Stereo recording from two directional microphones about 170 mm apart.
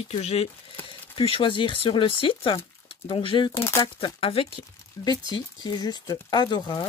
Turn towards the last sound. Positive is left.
turn(degrees=25)  # may be behind; listen again after turning